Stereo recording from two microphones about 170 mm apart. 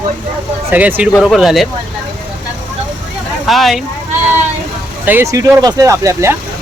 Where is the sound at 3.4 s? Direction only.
Centre (ahead or behind).